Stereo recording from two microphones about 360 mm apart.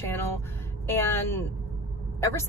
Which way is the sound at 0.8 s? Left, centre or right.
Centre.